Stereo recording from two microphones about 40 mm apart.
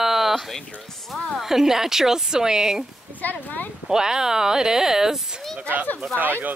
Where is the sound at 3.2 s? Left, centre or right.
Left.